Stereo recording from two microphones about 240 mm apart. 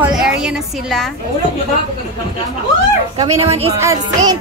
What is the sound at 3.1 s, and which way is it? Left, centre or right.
Speech, right.